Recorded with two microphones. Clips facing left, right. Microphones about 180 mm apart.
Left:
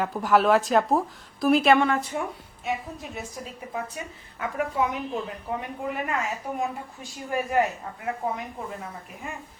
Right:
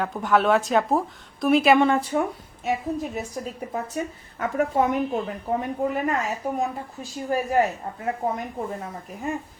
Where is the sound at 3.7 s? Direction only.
45° right (ahead or behind).